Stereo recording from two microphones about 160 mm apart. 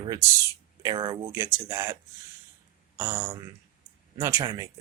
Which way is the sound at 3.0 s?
15° right (ahead or behind).